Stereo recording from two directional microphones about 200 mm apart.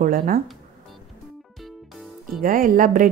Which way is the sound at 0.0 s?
45° right (ahead or behind).